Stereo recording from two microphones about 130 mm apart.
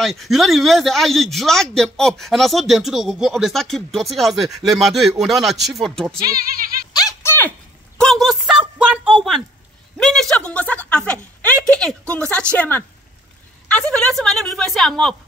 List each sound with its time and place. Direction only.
0.0 s speech: centre (ahead or behind)
6.9 s a sound: 30° left (ahead or behind)
8.0 s speech: centre (ahead or behind)